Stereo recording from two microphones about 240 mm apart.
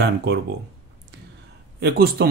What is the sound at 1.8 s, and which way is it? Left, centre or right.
Speech, right.